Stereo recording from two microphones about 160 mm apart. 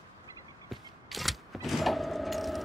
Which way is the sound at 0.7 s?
Centre (ahead or behind).